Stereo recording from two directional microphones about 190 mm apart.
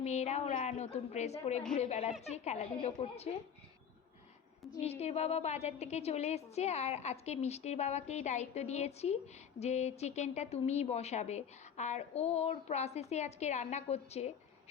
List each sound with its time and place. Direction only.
0.0 s a woman's voice: 35° left (ahead or behind)
4.8 s a woman's voice: 35° left (ahead or behind)